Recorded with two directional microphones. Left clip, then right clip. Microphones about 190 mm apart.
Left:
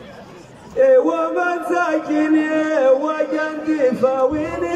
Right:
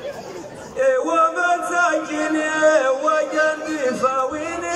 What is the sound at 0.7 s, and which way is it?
Music, 30° left (ahead or behind).